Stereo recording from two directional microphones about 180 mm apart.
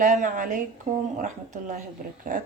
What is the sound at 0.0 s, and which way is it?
Speech, 45° right (ahead or behind).